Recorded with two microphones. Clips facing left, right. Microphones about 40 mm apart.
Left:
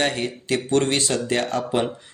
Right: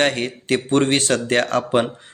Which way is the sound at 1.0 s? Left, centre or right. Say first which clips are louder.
Right 4 dB; right.